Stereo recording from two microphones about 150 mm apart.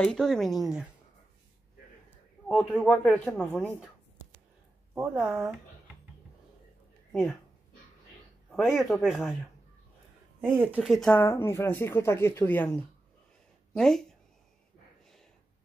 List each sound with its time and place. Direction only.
0.0 s speech: 5° left (ahead or behind)
2.0 s a sound: 10° left (ahead or behind)
5.0 s speech: 5° right (ahead or behind)
7.1 s speech: centre (ahead or behind)
8.5 s speech: centre (ahead or behind)
10.4 s speech: 10° right (ahead or behind)
11.1 s speech: 15° left (ahead or behind)